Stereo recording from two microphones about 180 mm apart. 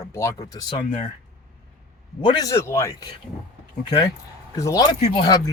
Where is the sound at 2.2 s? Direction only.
20° left (ahead or behind).